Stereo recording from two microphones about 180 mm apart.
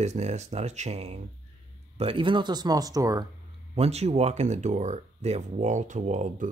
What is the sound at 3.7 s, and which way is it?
Speech, 35° right (ahead or behind).